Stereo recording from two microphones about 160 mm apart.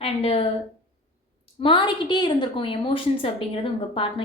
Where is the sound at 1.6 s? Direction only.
30° left (ahead or behind).